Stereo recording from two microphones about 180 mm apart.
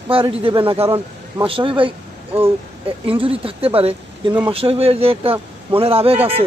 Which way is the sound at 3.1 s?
30° right (ahead or behind).